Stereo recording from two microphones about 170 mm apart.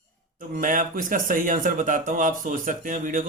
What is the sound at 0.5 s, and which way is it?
Speech, 50° right (ahead or behind).